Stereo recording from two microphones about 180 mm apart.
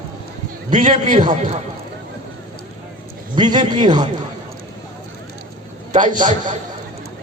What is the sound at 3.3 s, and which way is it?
Speech, 25° right (ahead or behind).